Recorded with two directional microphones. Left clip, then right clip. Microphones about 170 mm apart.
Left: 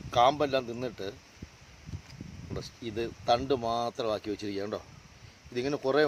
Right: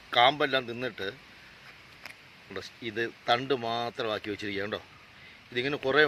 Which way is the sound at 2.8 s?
15° left (ahead or behind).